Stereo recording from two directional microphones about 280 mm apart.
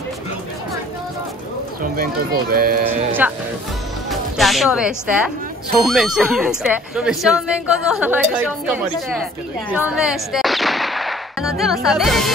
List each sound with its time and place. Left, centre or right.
1.8 s speech: right
3.2 s speech: centre